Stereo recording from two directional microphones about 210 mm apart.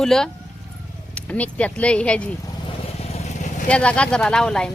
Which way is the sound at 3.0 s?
30° left (ahead or behind).